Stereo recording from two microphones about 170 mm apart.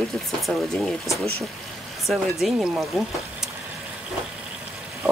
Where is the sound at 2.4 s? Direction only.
5° right (ahead or behind).